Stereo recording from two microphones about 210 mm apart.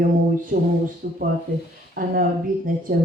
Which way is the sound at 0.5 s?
40° right (ahead or behind).